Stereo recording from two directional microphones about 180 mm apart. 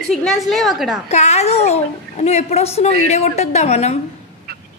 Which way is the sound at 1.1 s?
40° left (ahead or behind).